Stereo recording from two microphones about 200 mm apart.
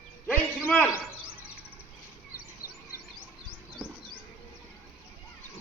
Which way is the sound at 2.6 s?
45° left (ahead or behind).